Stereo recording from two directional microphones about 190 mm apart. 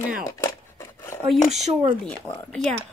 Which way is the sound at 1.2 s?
Centre (ahead or behind).